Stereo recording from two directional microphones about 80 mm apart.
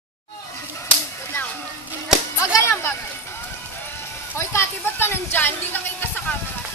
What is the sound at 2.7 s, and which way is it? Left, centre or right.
Speech, left.